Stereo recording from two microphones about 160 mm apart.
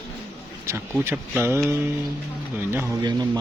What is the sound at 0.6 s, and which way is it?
Speech, 15° right (ahead or behind).